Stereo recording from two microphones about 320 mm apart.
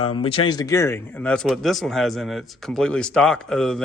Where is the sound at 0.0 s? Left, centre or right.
Centre.